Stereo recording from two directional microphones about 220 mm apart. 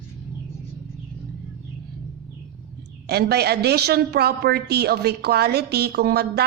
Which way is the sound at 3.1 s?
45° right (ahead or behind).